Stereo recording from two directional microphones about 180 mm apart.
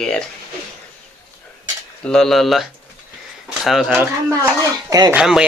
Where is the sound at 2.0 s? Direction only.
5° left (ahead or behind).